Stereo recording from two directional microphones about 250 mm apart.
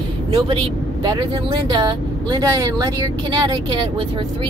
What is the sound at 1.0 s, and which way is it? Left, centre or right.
Speech, centre.